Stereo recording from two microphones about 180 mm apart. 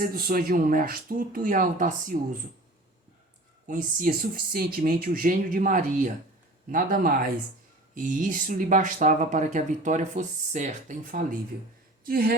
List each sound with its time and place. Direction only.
0.0 s speech: 55° right (ahead or behind)
3.7 s speech: 50° right (ahead or behind)